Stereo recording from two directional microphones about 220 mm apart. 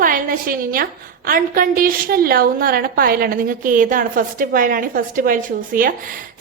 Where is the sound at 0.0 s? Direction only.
40° right (ahead or behind).